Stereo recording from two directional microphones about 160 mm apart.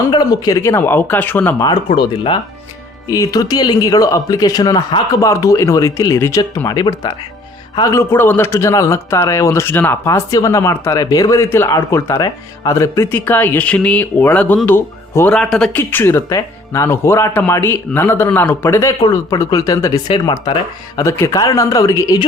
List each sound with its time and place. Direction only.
0.0 s a man's voice: 25° left (ahead or behind)
2.0 s a man's voice: 30° left (ahead or behind)